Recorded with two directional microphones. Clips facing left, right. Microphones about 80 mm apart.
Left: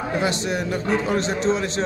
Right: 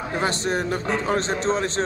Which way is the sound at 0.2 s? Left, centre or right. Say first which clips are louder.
Right 3 dB; right.